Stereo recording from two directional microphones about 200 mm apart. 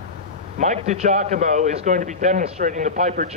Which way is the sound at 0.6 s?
35° right (ahead or behind).